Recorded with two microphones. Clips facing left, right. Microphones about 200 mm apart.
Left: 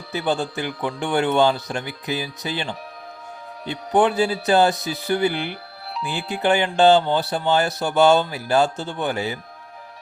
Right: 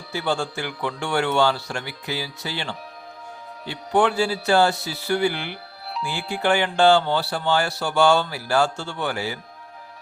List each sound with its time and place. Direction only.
0.1 s speech: 20° left (ahead or behind)